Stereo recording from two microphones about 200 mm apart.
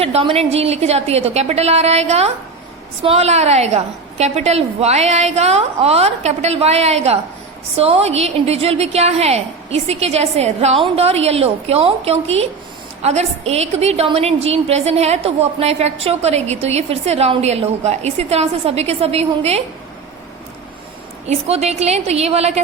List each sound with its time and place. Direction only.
0.0 s a woman's voice: 30° right (ahead or behind)
21.2 s a woman's voice: 30° right (ahead or behind)